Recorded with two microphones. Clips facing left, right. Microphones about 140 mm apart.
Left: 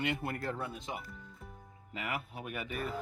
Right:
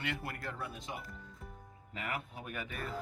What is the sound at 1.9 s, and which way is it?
Speech, 5° left (ahead or behind).